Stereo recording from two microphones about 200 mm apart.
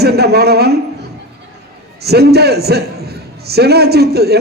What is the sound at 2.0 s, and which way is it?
A man's voice, 55° right (ahead or behind).